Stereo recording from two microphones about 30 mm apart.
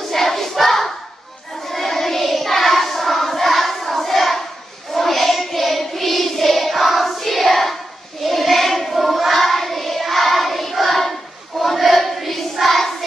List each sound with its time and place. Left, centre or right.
0.1 s a sound: centre
1.7 s child singing: centre
8.9 s choir: centre
9.4 s child singing: centre